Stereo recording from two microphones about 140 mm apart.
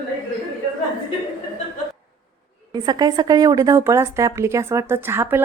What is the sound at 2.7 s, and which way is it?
A woman's voice, 30° right (ahead or behind).